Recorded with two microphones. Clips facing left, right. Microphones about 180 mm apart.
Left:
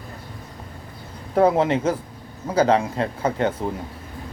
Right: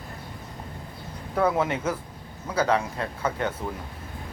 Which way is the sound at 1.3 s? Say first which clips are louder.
Left 6 dB; 30° left (ahead or behind).